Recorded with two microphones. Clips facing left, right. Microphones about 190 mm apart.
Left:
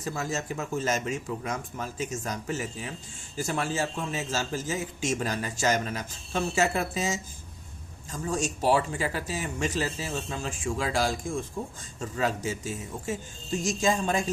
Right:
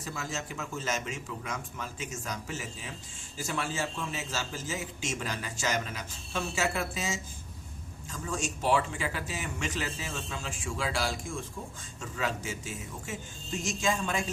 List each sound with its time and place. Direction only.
0.0 s a man's voice: 45° left (ahead or behind)